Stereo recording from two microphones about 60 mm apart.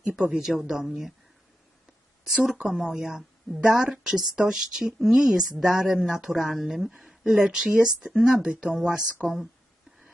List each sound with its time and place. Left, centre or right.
0.2 s a woman's voice: centre
2.4 s a woman's voice: centre